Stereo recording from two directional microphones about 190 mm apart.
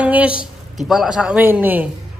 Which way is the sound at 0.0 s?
5° right (ahead or behind).